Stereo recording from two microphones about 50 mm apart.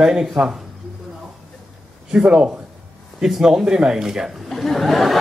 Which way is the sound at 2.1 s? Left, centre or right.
Centre.